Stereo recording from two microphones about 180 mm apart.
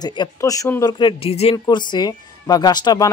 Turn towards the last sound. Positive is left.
turn(degrees=20)  # may be behind; listen again after turning